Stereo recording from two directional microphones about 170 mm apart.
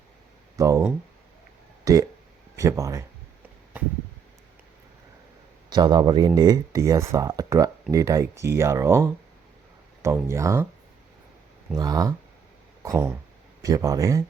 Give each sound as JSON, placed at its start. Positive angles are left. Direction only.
{"t": 0.5, "sound": "speech", "side_deg": -20}
{"t": 5.7, "sound": "speech", "side_deg": -25}
{"t": 11.8, "sound": "speech", "side_deg": -20}